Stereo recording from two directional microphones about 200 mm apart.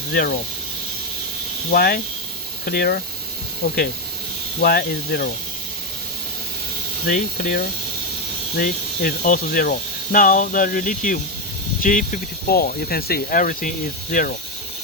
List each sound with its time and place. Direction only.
0.1 s speech: 45° left (ahead or behind)
1.7 s speech: 50° left (ahead or behind)
4.6 s speech: 50° left (ahead or behind)
7.1 s speech: 45° left (ahead or behind)